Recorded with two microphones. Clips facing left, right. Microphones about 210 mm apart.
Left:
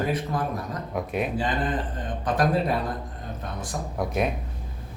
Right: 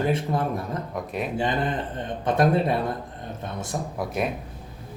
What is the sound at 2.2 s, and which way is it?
Speech, 25° right (ahead or behind).